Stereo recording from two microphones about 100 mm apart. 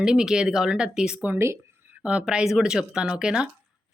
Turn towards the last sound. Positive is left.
turn(degrees=-5)  # may be behind; listen again after turning